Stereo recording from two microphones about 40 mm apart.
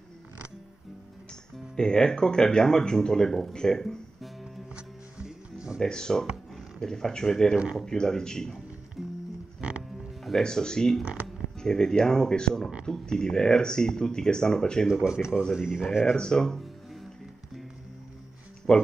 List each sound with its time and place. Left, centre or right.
1.8 s speech: centre
4.7 s music: right
5.8 s speech: centre
9.0 s music: centre
9.6 s music: right
10.4 s speech: centre
15.0 s speech: centre
16.2 s speech: centre
18.7 s speech: left